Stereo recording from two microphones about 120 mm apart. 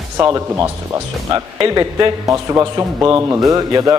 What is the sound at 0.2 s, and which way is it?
A man's voice, 30° right (ahead or behind).